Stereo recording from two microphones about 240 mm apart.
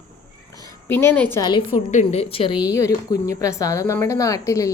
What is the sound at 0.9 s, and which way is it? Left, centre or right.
A woman's voice, centre.